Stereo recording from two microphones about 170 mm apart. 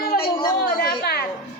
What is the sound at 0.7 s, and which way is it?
Speech, 70° left (ahead or behind).